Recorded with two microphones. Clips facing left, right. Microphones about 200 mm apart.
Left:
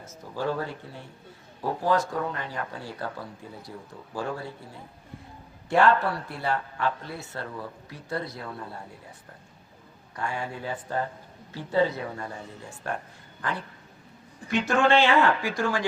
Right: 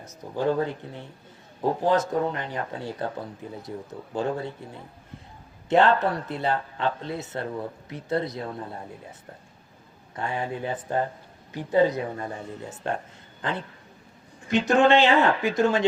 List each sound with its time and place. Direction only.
0.0 s speech: 20° right (ahead or behind)
10.2 s a woman's voice: 20° right (ahead or behind)